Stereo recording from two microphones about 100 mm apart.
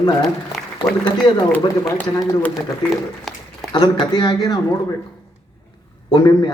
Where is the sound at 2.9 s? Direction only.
Centre (ahead or behind).